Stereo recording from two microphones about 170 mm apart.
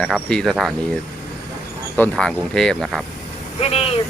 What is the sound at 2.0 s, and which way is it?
Speech, 5° left (ahead or behind).